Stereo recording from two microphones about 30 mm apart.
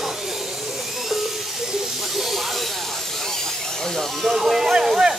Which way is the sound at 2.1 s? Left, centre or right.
Centre.